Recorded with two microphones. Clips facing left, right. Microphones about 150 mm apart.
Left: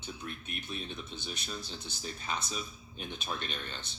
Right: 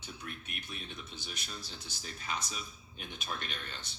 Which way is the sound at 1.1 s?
25° left (ahead or behind).